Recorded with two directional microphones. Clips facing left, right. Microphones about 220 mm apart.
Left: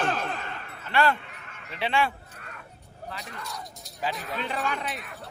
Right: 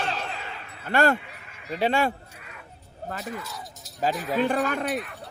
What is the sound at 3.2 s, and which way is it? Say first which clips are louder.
Speech: right 4 dB; 5° right (ahead or behind).